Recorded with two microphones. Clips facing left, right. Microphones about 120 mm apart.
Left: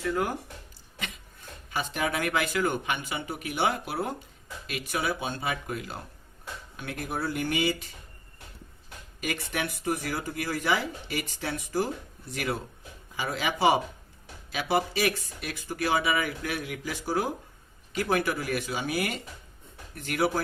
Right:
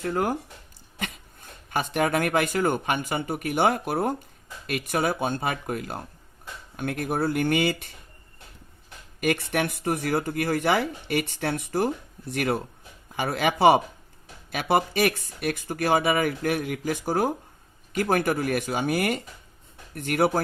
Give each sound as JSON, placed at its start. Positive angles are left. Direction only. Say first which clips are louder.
{"t": 0.0, "sound": "speech", "louder": "right 3 dB", "side_deg": -45}
{"t": 1.7, "sound": "speech", "louder": "right 6 dB", "side_deg": -55}
{"t": 9.2, "sound": "speech", "louder": "right 7 dB", "side_deg": -55}